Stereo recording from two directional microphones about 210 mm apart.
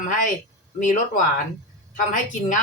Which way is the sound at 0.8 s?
35° left (ahead or behind).